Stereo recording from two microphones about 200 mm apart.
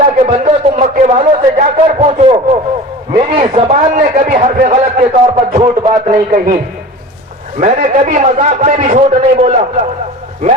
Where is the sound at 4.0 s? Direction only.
40° right (ahead or behind).